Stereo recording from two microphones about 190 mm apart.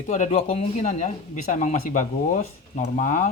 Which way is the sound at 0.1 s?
30° left (ahead or behind).